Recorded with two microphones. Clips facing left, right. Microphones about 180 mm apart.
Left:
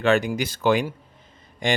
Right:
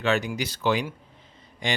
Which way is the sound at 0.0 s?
50° left (ahead or behind).